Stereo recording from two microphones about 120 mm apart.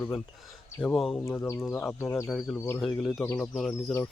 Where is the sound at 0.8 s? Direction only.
Centre (ahead or behind).